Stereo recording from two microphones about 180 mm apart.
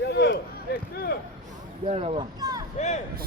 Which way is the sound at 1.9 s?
35° right (ahead or behind).